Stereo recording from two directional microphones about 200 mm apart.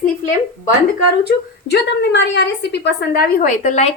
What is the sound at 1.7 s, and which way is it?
A woman's voice, 60° left (ahead or behind).